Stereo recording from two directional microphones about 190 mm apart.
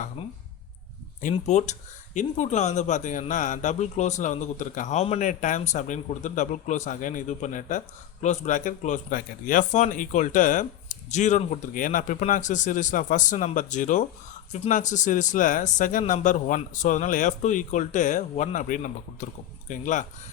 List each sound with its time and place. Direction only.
1.2 s speech: 35° left (ahead or behind)